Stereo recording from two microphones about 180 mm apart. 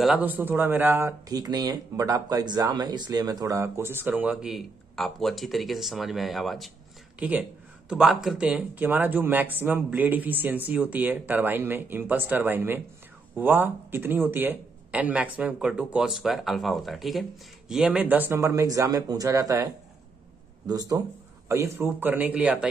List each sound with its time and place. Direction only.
0.0 s speech: 5° right (ahead or behind)